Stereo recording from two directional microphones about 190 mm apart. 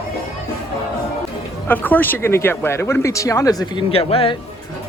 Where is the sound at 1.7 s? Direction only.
10° left (ahead or behind).